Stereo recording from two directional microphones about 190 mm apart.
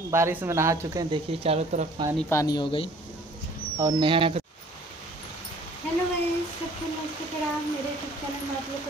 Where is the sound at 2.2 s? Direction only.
20° left (ahead or behind).